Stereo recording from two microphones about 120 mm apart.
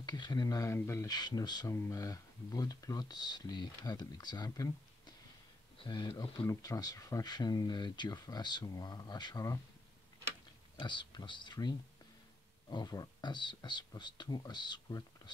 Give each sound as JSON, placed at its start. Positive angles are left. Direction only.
{"t": 0.0, "sound": "speech", "side_deg": 35}
{"t": 1.1, "sound": "speech", "side_deg": 35}
{"t": 6.4, "sound": "speech", "side_deg": 25}
{"t": 10.8, "sound": "speech", "side_deg": 40}